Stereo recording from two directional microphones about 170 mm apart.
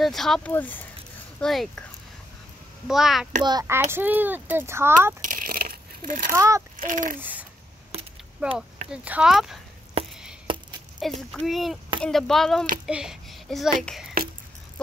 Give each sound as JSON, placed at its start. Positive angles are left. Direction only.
{"t": 0.0, "sound": "a child's voice", "side_deg": 0}
{"t": 2.9, "sound": "a child's voice", "side_deg": 0}
{"t": 3.4, "sound": "a child's voice", "side_deg": -20}
{"t": 5.2, "sound": "a sound", "side_deg": -55}
{"t": 6.3, "sound": "speech", "side_deg": -20}
{"t": 6.8, "sound": "speech", "side_deg": -50}
{"t": 7.2, "sound": "a sound", "side_deg": -10}
{"t": 8.4, "sound": "a child's voice", "side_deg": -5}
{"t": 10.0, "sound": "a sound", "side_deg": -35}
{"t": 10.4, "sound": "chop", "side_deg": -30}
{"t": 11.0, "sound": "a child's voice", "side_deg": 0}
{"t": 12.8, "sound": "a sound", "side_deg": -5}
{"t": 13.8, "sound": "a child's voice", "side_deg": 0}